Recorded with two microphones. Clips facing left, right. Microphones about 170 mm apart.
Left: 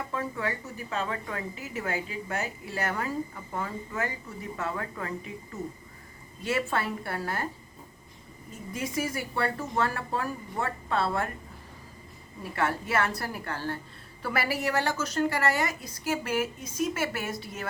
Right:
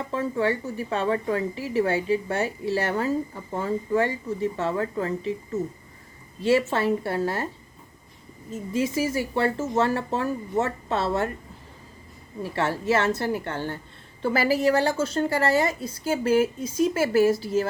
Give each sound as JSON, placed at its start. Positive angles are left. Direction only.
{"t": 0.1, "sound": "a woman's voice", "side_deg": -30}
{"t": 8.7, "sound": "a woman's voice", "side_deg": -25}
{"t": 12.4, "sound": "a woman's voice", "side_deg": -25}